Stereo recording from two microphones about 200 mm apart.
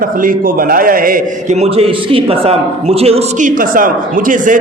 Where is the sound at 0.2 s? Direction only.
45° right (ahead or behind).